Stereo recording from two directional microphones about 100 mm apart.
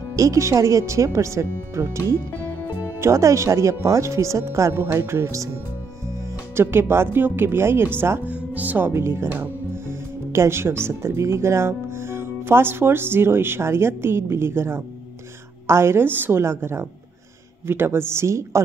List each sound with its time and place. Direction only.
0.1 s speech: 30° right (ahead or behind)
6.5 s a woman's voice: 25° right (ahead or behind)